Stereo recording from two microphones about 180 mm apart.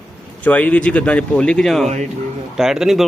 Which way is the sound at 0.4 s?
10° left (ahead or behind).